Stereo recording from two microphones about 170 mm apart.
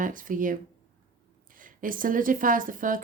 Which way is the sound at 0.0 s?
50° right (ahead or behind).